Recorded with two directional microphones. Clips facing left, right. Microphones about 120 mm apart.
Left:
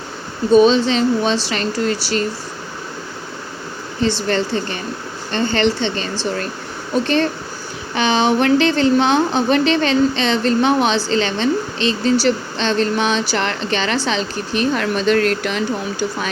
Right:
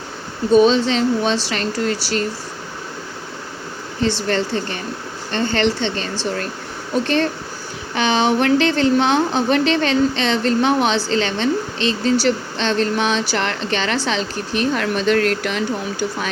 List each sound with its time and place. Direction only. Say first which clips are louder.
0.5 s speech: left 1 dB; 20° left (ahead or behind)
4.3 s speech: left 1 dB; 20° left (ahead or behind)